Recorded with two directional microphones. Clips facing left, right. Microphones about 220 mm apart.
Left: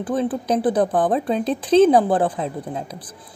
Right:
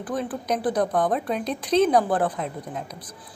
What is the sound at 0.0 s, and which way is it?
A woman's voice, 30° left (ahead or behind).